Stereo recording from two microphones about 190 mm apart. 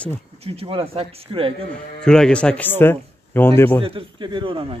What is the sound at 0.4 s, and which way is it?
Speech, 30° right (ahead or behind).